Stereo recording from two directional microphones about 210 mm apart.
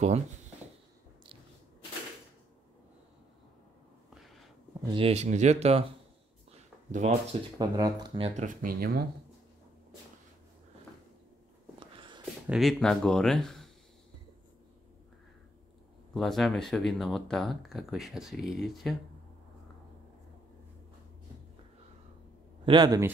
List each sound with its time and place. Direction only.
4.1 s a sound: centre (ahead or behind)
4.8 s speech: 25° right (ahead or behind)
6.9 s speech: 35° right (ahead or behind)
7.5 s speech: 20° right (ahead or behind)
8.4 s speech: 40° right (ahead or behind)
12.4 s speech: centre (ahead or behind)
16.1 s speech: centre (ahead or behind)
22.7 s speech: 20° right (ahead or behind)